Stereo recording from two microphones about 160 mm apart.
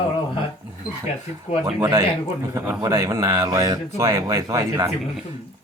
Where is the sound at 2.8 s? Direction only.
20° right (ahead or behind).